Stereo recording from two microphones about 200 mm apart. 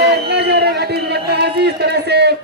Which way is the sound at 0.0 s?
55° right (ahead or behind).